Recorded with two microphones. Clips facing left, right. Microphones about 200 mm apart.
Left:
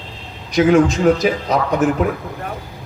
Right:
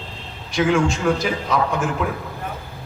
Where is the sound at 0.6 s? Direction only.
40° left (ahead or behind).